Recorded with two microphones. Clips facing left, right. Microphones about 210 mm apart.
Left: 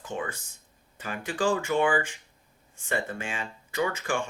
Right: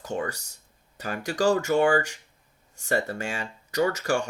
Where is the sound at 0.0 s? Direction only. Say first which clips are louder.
Right 4 dB; 40° right (ahead or behind).